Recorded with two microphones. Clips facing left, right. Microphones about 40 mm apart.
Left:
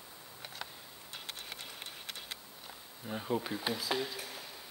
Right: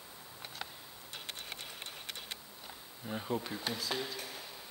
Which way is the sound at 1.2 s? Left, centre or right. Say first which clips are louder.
Right 1 dB; centre.